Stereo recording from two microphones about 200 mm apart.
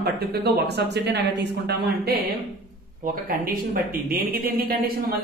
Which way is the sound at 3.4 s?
50° right (ahead or behind).